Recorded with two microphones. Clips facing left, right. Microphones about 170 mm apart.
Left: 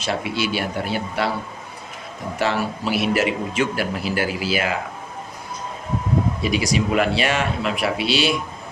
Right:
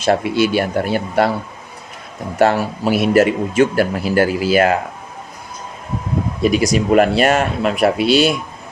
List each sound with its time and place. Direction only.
0.0 s speech: 50° right (ahead or behind)
2.4 s speech: 50° right (ahead or behind)
6.4 s speech: 50° right (ahead or behind)